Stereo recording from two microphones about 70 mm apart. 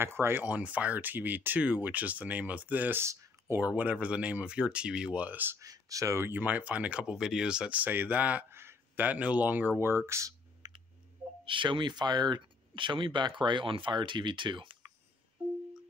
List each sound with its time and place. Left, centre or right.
0.0 s speech: right
0.5 s speech: centre
3.0 s a sound: right
3.5 s speech: right
5.6 s speech: right
6.2 s speech: right
8.5 s a sound: right
9.0 s speech: right
10.6 s clicking: right
11.8 s speech: right